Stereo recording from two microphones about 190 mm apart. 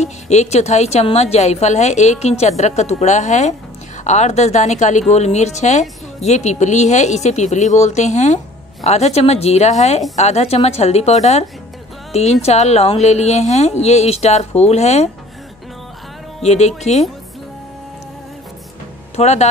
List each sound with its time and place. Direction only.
0.0 s speech: 35° left (ahead or behind)
16.4 s speech: 35° left (ahead or behind)
19.1 s speech: 35° left (ahead or behind)